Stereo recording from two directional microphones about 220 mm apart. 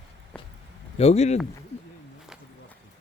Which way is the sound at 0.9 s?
30° left (ahead or behind).